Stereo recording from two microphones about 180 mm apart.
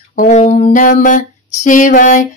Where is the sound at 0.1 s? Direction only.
45° left (ahead or behind).